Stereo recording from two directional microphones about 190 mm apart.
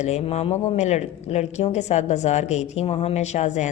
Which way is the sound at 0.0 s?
35° left (ahead or behind).